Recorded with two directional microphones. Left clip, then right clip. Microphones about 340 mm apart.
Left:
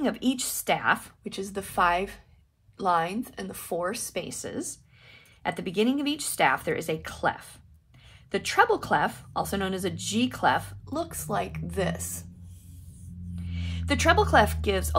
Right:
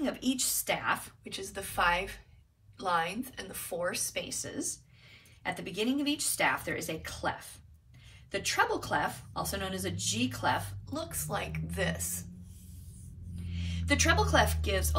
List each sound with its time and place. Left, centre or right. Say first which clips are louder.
0.0 s speech: left 4 dB; centre
13.5 s a sound: left 2 dB; centre
14.3 s speech: left 6 dB; centre